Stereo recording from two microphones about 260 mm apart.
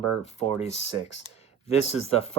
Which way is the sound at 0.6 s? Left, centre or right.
Left.